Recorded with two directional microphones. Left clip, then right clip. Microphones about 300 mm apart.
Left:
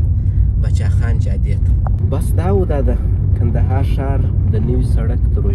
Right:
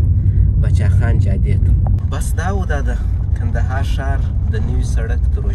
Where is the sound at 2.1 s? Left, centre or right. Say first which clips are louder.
Left 5 dB; right.